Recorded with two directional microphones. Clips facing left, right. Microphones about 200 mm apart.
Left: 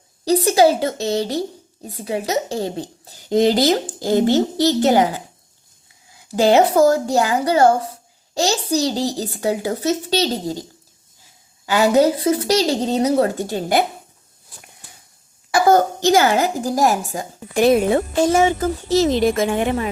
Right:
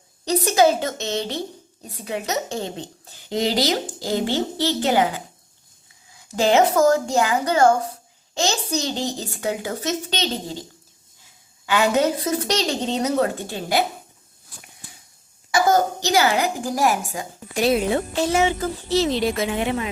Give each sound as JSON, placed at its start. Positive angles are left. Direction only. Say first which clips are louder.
{"t": 0.3, "sound": "speech", "louder": "left 3 dB", "side_deg": 30}
{"t": 6.4, "sound": "speech", "louder": "left 3 dB", "side_deg": 35}
{"t": 11.6, "sound": "speech", "louder": "left 5 dB", "side_deg": 35}
{"t": 15.5, "sound": "speech", "louder": "left 4 dB", "side_deg": 55}
{"t": 17.5, "sound": "speech", "louder": "left 5 dB", "side_deg": 55}